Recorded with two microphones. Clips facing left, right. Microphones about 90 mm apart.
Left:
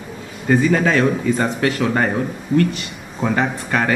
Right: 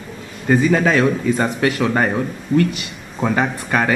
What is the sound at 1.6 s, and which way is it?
Speech, 5° right (ahead or behind).